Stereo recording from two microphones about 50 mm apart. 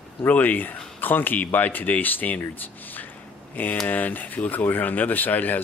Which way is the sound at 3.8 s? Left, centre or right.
Left.